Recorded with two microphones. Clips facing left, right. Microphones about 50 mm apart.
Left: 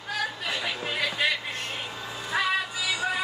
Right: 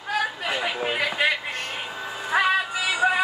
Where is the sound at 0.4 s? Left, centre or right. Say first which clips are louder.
Right 4 dB; right.